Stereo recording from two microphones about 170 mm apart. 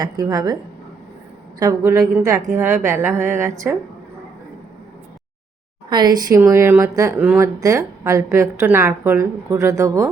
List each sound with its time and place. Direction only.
0.0 s a woman's voice: 20° right (ahead or behind)
1.5 s a woman's voice: 20° right (ahead or behind)
5.9 s speech: 25° right (ahead or behind)